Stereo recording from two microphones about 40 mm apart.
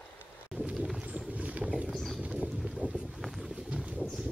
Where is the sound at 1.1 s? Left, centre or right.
Right.